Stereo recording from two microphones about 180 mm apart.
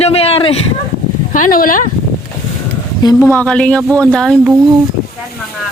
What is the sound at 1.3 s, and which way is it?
Speech, 50° left (ahead or behind).